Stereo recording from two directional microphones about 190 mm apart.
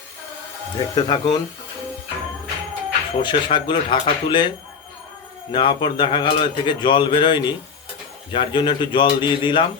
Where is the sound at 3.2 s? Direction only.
25° left (ahead or behind).